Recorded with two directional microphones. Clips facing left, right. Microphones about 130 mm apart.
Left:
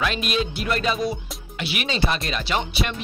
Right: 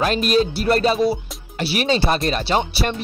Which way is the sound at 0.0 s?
40° right (ahead or behind).